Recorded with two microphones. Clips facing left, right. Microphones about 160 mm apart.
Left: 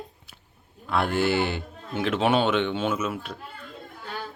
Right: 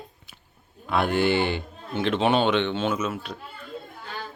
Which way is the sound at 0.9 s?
Centre (ahead or behind).